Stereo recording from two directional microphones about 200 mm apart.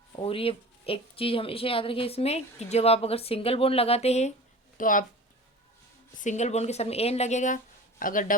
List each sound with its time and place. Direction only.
0.2 s speech: 25° left (ahead or behind)
4.8 s speech: 40° left (ahead or behind)
6.2 s speech: 35° left (ahead or behind)